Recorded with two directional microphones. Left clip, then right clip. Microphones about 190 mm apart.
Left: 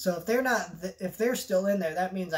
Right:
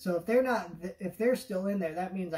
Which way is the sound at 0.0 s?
10° left (ahead or behind).